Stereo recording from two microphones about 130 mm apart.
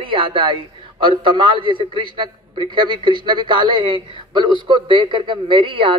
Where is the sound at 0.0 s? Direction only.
40° right (ahead or behind).